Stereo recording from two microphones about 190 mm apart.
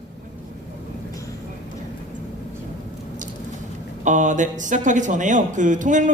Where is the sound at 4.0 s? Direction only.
40° right (ahead or behind).